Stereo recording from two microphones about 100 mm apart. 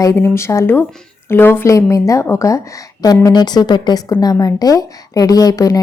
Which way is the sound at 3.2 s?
45° left (ahead or behind).